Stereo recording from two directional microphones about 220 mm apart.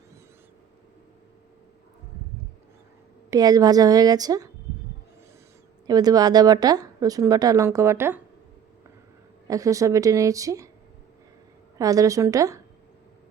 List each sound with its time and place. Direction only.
3.2 s a woman's voice: 15° right (ahead or behind)
5.8 s a woman's voice: 15° right (ahead or behind)
9.5 s a woman's voice: 15° right (ahead or behind)
11.8 s a woman's voice: 15° right (ahead or behind)